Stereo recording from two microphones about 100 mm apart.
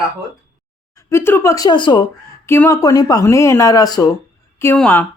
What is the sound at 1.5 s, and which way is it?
Speech, 45° left (ahead or behind).